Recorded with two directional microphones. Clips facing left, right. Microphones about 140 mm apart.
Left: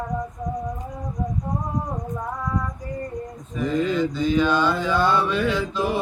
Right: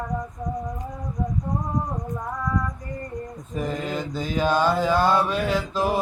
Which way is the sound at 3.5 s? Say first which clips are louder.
Left 5 dB; 45° right (ahead or behind).